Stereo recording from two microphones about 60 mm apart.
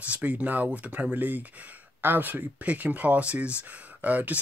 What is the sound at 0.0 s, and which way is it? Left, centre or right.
Speech, right.